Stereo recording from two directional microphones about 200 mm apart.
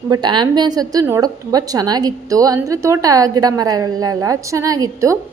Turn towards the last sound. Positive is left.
turn(degrees=-15)  # may be behind; listen again after turning